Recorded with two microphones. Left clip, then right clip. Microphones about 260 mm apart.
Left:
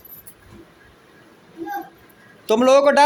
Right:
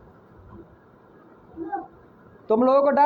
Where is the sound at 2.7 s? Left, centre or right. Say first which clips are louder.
Left 6 dB; left.